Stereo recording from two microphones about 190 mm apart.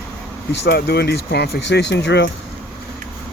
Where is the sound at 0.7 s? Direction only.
60° left (ahead or behind).